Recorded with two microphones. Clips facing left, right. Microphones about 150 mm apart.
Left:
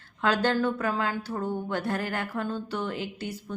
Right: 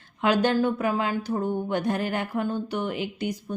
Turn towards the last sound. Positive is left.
turn(degrees=-15)  # may be behind; listen again after turning